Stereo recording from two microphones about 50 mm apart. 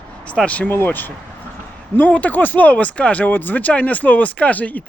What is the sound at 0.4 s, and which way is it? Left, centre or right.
Speech, left.